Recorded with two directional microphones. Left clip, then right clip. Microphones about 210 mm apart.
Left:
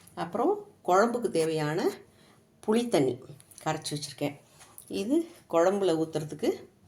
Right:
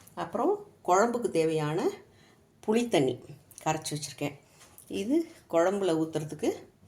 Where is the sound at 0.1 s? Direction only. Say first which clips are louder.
Left 1 dB; centre (ahead or behind).